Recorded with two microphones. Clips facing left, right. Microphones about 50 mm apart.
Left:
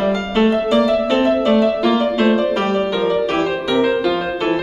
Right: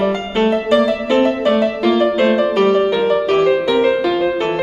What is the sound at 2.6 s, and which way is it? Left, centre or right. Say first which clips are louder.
Music: right 4 dB; centre.